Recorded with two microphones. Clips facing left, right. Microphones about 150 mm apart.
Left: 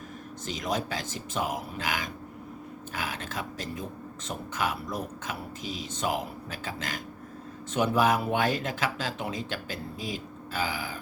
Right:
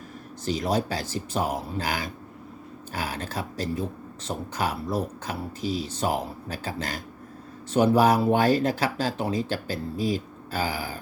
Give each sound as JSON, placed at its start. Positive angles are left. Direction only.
{"t": 0.4, "sound": "speech", "side_deg": -35}